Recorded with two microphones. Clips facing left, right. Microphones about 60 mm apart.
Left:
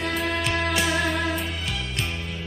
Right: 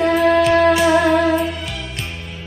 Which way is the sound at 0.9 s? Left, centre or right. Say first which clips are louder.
Right 11 dB; right.